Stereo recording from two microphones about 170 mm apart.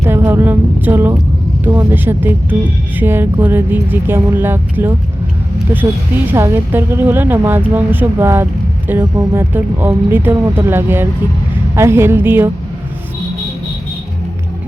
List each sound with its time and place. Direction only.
0.0 s speech: 15° right (ahead or behind)
6.3 s speech: 15° right (ahead or behind)